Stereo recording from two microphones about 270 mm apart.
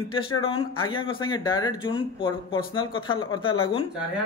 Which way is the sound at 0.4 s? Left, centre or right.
Centre.